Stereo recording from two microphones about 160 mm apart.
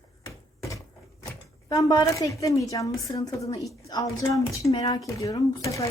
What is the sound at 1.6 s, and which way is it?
A woman's voice, 20° left (ahead or behind).